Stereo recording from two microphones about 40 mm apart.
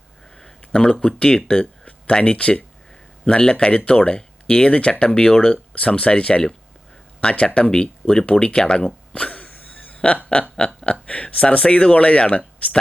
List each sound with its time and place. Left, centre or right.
0.3 s speech: centre
3.2 s speech: centre
3.8 s speech: left
9.1 s cough: left
9.5 s a sound: left
10.6 s speech: left